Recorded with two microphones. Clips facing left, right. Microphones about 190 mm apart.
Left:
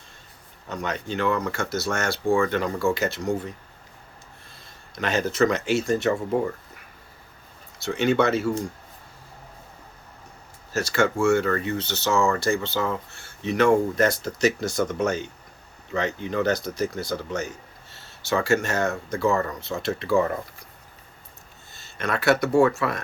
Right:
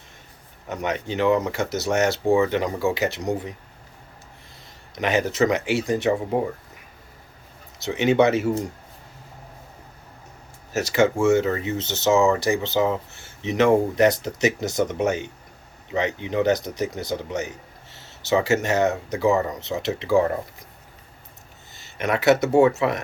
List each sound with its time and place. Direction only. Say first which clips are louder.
0.7 s speech: right 3 dB; 20° right (ahead or behind)
4.9 s speech: right 1 dB; 15° right (ahead or behind)
7.8 s speech: right 3 dB; 20° right (ahead or behind)
10.7 s speech: right 3 dB; 20° right (ahead or behind)
21.7 s speech: right 4 dB; 15° right (ahead or behind)